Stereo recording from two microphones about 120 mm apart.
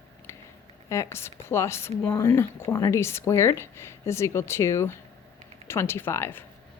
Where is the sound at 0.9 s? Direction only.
25° left (ahead or behind).